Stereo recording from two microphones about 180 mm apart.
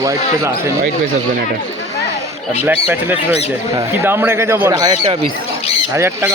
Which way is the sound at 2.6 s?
10° right (ahead or behind).